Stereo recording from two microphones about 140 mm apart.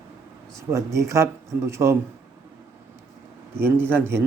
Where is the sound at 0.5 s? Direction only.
20° right (ahead or behind).